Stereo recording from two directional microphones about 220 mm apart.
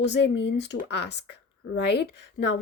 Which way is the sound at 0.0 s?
55° left (ahead or behind).